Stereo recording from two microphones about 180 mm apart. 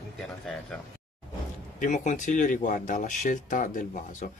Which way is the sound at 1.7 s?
40° left (ahead or behind).